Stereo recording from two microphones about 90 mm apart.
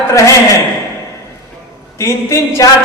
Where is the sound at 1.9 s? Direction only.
35° left (ahead or behind).